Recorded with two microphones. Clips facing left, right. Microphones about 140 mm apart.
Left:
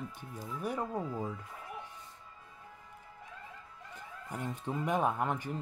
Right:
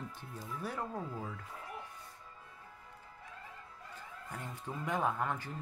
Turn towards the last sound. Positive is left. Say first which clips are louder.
# left 3 dB
turn(degrees=15)  # may be behind; listen again after turning